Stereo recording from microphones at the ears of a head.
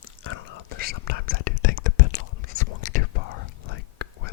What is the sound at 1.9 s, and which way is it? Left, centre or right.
Whispering, left.